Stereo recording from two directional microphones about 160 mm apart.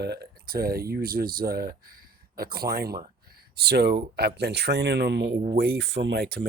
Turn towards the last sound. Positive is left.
turn(degrees=-85)